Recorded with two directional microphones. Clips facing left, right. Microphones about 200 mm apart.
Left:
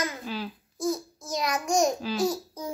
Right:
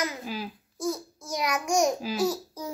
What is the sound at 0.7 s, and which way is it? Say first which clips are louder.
Speech: left 2 dB; 10° left (ahead or behind).